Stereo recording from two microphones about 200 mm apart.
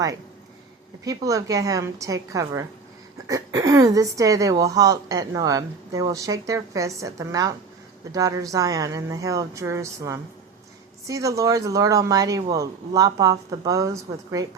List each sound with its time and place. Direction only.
1.0 s speech: 15° right (ahead or behind)